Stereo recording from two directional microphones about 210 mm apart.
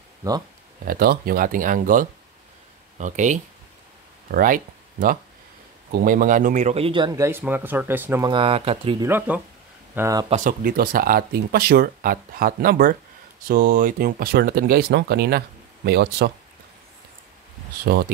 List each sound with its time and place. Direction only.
0.8 s speech: 45° right (ahead or behind)
6.0 s a man's voice: 40° right (ahead or behind); by 8.3 s 10° right (ahead or behind)
8.3 s speech: 25° right (ahead or behind)
9.0 s a man's voice: 10° right (ahead or behind)
10.3 s speech: 40° right (ahead or behind)
17.9 s speech: 50° right (ahead or behind)